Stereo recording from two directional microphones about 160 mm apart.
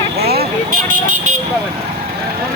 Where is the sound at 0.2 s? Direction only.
80° right.